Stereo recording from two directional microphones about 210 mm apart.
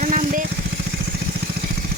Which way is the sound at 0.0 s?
40° right (ahead or behind).